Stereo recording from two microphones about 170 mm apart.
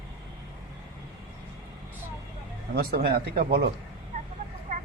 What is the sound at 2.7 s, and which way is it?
Speech, 65° right (ahead or behind).